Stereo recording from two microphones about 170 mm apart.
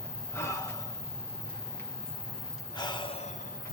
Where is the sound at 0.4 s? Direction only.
15° left (ahead or behind).